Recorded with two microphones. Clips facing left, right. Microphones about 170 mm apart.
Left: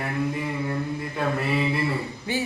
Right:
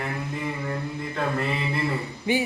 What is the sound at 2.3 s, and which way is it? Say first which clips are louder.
Music: right 5 dB; 15° right (ahead or behind).